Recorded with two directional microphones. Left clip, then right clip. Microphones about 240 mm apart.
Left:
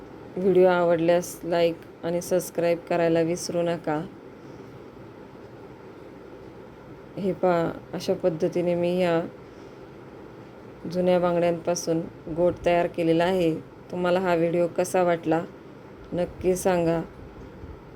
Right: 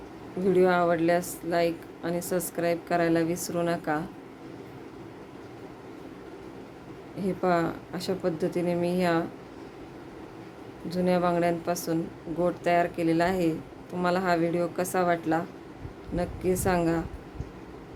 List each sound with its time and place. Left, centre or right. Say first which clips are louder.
0.4 s a woman's voice: left 3 dB; centre
7.2 s speech: left 3 dB; centre
10.8 s speech: left 4 dB; centre